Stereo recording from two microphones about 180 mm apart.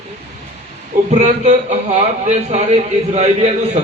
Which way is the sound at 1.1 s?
40° right (ahead or behind).